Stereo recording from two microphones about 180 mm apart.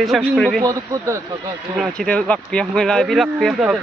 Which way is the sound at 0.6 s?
15° right (ahead or behind).